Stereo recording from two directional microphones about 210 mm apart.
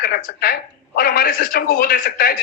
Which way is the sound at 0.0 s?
45° left (ahead or behind).